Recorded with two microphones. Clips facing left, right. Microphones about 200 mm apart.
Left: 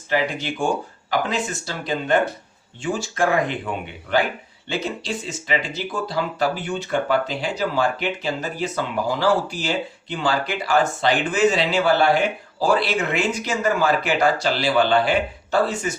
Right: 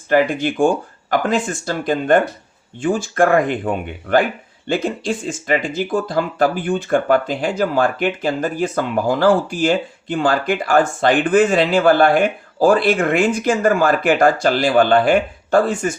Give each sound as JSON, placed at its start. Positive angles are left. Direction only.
{"t": 0.1, "sound": "speech", "side_deg": -50}